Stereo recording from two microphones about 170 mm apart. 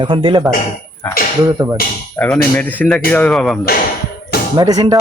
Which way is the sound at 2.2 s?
10° left (ahead or behind).